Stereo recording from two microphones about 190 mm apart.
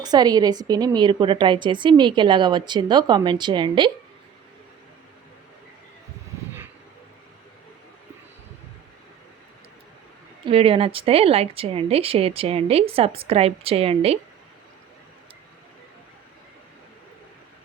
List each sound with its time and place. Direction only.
0.0 s a woman's voice: 20° right (ahead or behind)
10.4 s speech: 30° right (ahead or behind)